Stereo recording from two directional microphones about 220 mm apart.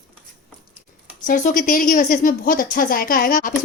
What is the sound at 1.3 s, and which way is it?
A woman's voice, 40° left (ahead or behind).